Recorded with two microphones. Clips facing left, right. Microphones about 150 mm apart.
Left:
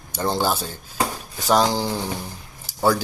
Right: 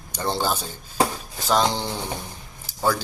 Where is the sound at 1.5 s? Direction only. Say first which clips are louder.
Left 3 dB; 5° left (ahead or behind).